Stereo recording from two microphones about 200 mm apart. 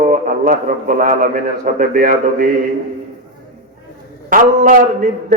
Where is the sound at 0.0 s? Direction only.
40° right (ahead or behind).